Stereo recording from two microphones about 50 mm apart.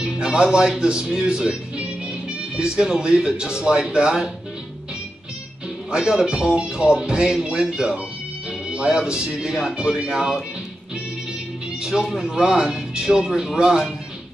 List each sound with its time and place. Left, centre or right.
0.0 s a man's voice: centre
5.9 s speech: centre
11.8 s speech: centre